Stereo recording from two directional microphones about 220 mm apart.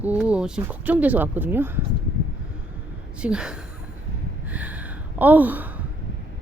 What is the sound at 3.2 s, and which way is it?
Speech, 5° right (ahead or behind).